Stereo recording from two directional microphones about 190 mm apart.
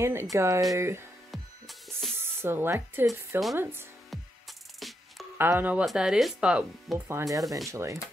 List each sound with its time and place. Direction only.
0.0 s speech: 15° right (ahead or behind)
1.3 s music: centre (ahead or behind)
2.1 s speech: 10° right (ahead or behind)
4.7 s music: centre (ahead or behind)
5.4 s speech: 10° right (ahead or behind)